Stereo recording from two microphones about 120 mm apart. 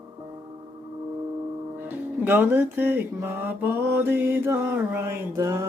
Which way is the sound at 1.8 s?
15° right (ahead or behind).